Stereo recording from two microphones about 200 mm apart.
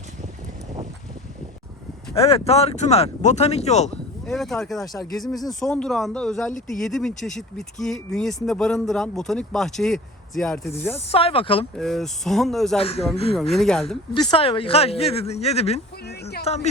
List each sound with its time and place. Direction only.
2.1 s speech: 30° left (ahead or behind)
4.3 s speech: centre (ahead or behind)
10.9 s speech: 30° left (ahead or behind)
11.8 s speech: centre (ahead or behind)
12.8 s speech: 30° left (ahead or behind)
13.3 s speech: centre (ahead or behind)
14.1 s speech: 20° left (ahead or behind)